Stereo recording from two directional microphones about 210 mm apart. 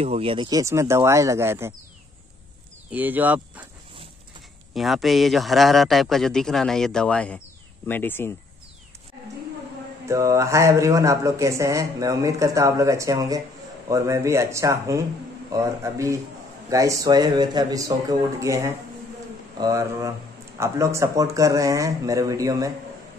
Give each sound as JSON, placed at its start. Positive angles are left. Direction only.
{"t": 0.0, "sound": "speech", "side_deg": -30}
{"t": 2.9, "sound": "speech", "side_deg": -10}
{"t": 4.7, "sound": "a man's voice", "side_deg": 0}
{"t": 10.0, "sound": "speech", "side_deg": -15}